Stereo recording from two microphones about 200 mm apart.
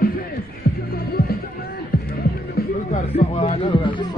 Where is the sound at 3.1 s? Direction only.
30° left (ahead or behind).